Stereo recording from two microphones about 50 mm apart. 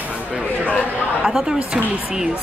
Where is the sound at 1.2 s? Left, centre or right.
Centre.